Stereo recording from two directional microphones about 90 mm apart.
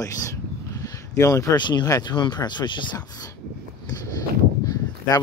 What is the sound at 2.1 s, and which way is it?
Speech, 55° left (ahead or behind).